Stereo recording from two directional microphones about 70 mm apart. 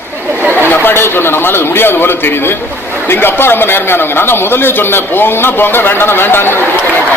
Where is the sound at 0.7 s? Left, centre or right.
Left.